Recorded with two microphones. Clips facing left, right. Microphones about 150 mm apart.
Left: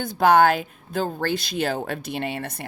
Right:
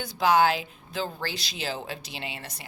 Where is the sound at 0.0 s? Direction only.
55° left (ahead or behind).